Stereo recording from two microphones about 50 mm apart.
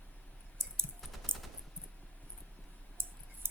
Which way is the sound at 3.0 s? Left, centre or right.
Right.